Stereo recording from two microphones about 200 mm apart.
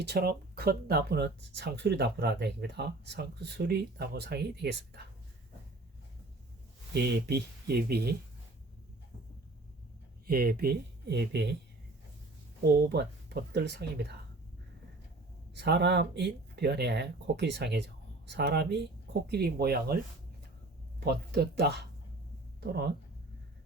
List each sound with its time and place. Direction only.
0.0 s speech: 55° right (ahead or behind)
6.9 s speech: 55° right (ahead or behind)
10.2 s speech: 50° right (ahead or behind)
12.9 s speech: 55° right (ahead or behind)
15.5 s speech: 60° right (ahead or behind)
21.0 s speech: 55° right (ahead or behind)